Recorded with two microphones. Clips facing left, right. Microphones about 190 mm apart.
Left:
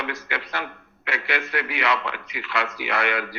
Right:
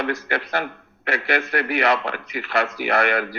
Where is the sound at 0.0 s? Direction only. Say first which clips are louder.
Right 6 dB; 40° right (ahead or behind).